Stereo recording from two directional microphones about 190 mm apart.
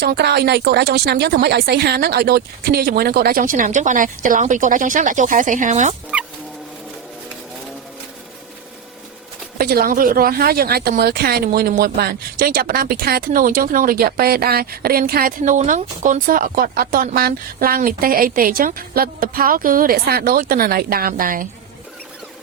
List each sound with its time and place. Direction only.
0.0 s a woman's voice: 55° right (ahead or behind); by 5.9 s 40° right (ahead or behind)
9.6 s a woman's voice: 50° right (ahead or behind)